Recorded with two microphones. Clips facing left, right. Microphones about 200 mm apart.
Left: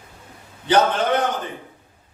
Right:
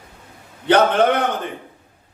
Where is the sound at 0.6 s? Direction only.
60° right (ahead or behind).